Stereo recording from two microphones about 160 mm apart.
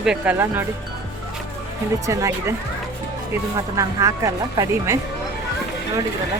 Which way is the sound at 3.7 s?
20° right (ahead or behind).